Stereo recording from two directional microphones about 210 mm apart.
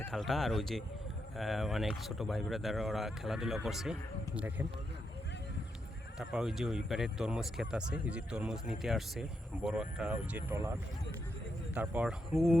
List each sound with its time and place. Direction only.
0.1 s speech: centre (ahead or behind)
6.1 s speech: centre (ahead or behind)
11.7 s speech: 5° right (ahead or behind)